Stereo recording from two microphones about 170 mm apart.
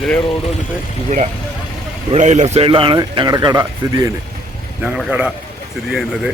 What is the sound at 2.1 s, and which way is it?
Speech, 45° right (ahead or behind).